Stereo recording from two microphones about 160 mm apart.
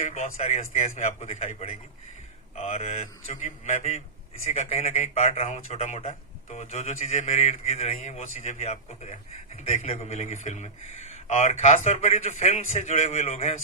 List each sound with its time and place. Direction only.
0.0 s a man's voice: 45° left (ahead or behind)
2.6 s a man's voice: 40° left (ahead or behind)